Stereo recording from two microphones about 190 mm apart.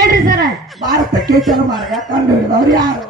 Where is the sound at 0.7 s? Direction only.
Centre (ahead or behind).